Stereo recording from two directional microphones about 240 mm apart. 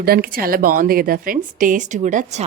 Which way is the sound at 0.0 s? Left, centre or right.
Right.